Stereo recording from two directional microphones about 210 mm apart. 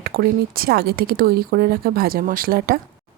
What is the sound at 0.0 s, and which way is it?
Speech, 45° right (ahead or behind).